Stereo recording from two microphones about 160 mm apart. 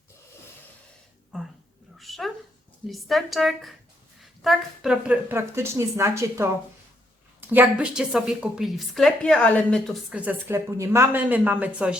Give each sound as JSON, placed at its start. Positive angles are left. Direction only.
{"t": 2.0, "sound": "a sound", "side_deg": 0}
{"t": 2.8, "sound": "a woman's voice", "side_deg": 0}
{"t": 5.3, "sound": "a woman's voice", "side_deg": -15}